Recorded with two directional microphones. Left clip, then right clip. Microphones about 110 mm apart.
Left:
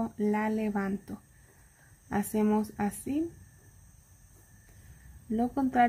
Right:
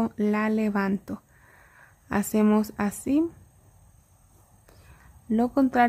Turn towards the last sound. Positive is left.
turn(degrees=-40)  # may be behind; listen again after turning